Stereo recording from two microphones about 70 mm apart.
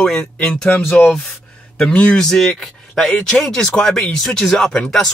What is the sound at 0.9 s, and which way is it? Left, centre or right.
A man's voice, left.